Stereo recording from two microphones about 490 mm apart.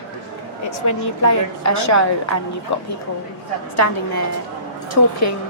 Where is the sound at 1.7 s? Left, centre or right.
Left.